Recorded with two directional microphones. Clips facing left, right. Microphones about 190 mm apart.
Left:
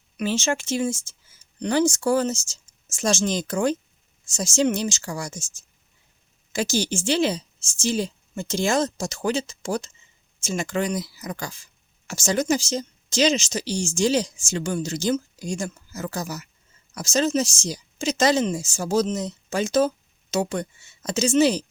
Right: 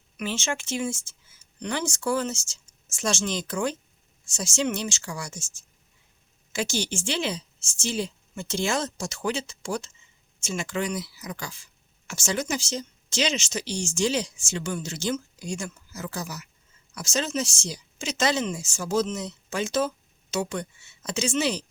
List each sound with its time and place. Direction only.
0.2 s speech: 40° left (ahead or behind)